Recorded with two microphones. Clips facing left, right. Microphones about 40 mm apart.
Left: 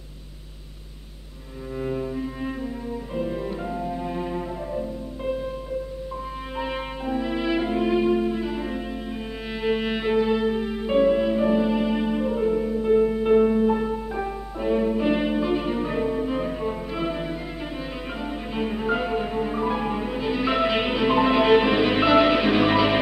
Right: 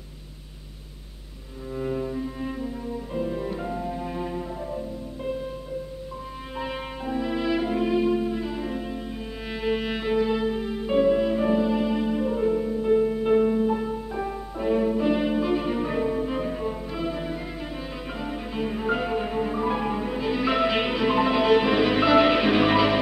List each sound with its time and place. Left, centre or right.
1.8 s cello: centre
3.2 s music: centre
6.6 s music: centre
12.3 s music: centre
14.6 s music: centre
15.0 s music: centre
16.9 s music: left
18.5 s music: centre
22.2 s music: centre